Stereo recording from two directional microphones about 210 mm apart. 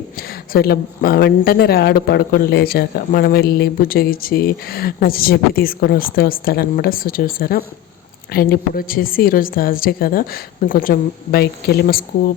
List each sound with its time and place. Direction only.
0.2 s speech: 45° left (ahead or behind)